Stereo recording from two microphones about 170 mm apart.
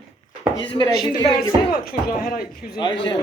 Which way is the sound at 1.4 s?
60° left (ahead or behind).